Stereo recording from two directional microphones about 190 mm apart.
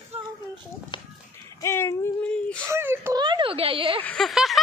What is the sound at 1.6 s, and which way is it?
Speech, 15° left (ahead or behind).